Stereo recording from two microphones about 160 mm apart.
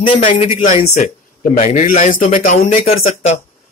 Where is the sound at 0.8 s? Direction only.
50° left (ahead or behind).